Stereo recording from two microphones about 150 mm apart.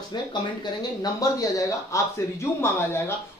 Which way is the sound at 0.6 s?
25° left (ahead or behind).